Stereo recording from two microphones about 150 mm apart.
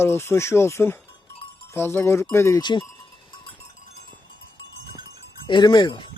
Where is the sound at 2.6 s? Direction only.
30° left (ahead or behind).